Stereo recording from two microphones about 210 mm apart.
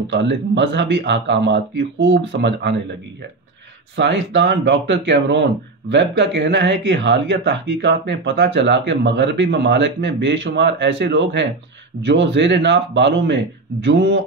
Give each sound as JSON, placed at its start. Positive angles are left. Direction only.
{"t": 0.1, "sound": "speech", "side_deg": -60}
{"t": 3.9, "sound": "speech", "side_deg": -60}